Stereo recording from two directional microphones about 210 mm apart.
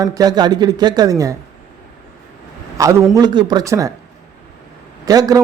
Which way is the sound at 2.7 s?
15° right (ahead or behind).